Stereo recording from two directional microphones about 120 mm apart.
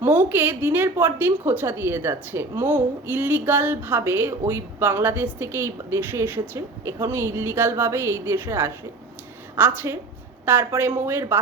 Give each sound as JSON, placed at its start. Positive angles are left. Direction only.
{"t": 0.0, "sound": "a woman's voice", "side_deg": -15}